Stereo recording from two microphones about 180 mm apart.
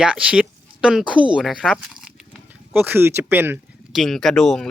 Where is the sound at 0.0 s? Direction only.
5° right (ahead or behind).